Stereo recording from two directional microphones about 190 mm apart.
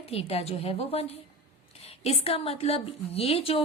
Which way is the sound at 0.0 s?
30° left (ahead or behind).